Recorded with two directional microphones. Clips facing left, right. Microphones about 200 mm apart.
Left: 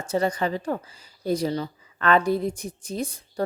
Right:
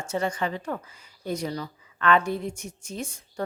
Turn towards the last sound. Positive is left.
turn(degrees=35)  # may be behind; listen again after turning